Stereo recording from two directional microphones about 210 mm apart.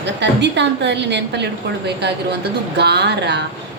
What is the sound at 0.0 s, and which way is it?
A woman's voice, 55° right (ahead or behind).